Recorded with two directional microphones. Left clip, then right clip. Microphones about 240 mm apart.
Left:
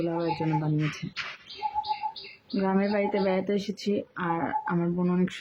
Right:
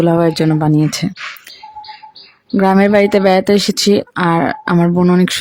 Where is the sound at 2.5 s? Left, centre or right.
Right.